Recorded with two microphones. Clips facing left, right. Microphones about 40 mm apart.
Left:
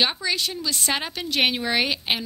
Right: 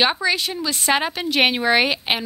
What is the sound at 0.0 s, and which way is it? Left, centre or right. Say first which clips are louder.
A woman's voice: right 4 dB; centre.